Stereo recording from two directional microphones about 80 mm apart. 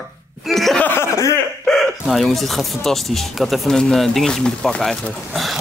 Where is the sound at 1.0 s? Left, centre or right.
Left.